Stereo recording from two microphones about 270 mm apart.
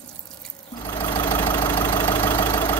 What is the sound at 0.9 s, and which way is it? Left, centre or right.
Vehicle, centre.